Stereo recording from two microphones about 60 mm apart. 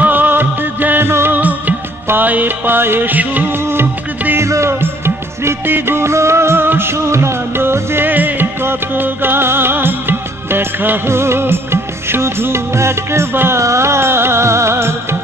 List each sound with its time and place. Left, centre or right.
0.0 s music: right
2.0 s music: right
4.7 s music: right
11.1 s music of bollywood: right
13.6 s music: right